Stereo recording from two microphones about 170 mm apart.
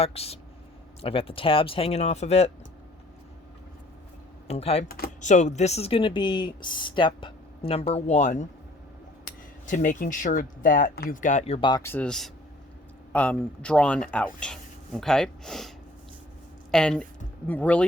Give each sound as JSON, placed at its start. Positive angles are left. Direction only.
{"t": 0.0, "sound": "speech", "side_deg": 35}
{"t": 4.4, "sound": "speech", "side_deg": 35}
{"t": 4.9, "sound": "speech", "side_deg": 60}
{"t": 5.2, "sound": "speech", "side_deg": 45}
{"t": 11.8, "sound": "speech", "side_deg": 10}
{"t": 16.7, "sound": "speech", "side_deg": 5}